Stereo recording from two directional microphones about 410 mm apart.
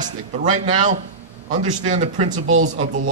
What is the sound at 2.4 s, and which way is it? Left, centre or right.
Speech, right.